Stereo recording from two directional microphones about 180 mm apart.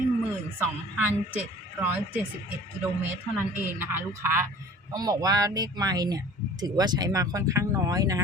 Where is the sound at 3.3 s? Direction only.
10° right (ahead or behind).